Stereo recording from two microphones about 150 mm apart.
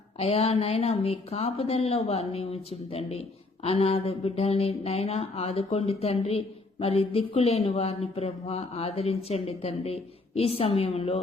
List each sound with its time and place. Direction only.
0.2 s speech: 45° left (ahead or behind)